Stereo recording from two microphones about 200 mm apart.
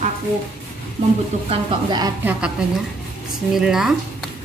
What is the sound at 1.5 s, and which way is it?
Speech, 20° right (ahead or behind).